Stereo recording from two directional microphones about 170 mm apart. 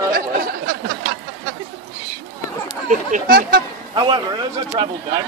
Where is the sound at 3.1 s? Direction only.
60° right (ahead or behind).